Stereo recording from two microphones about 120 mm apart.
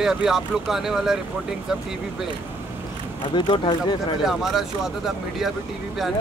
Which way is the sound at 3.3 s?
40° left (ahead or behind).